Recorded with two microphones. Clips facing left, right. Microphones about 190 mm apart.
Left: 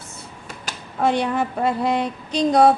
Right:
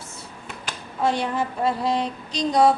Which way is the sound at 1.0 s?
60° left (ahead or behind).